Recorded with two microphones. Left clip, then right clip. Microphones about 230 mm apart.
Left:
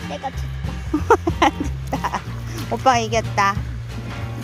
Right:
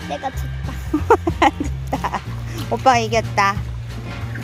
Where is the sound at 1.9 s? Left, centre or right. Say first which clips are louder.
Right 1 dB; centre.